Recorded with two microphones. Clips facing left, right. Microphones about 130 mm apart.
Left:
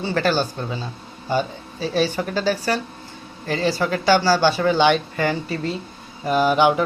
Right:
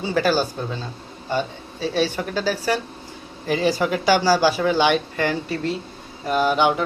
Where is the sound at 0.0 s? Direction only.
5° right (ahead or behind).